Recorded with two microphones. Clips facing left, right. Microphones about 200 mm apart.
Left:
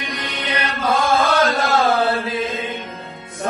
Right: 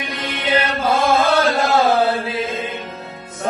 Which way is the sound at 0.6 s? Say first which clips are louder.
Right 2 dB; 25° right (ahead or behind).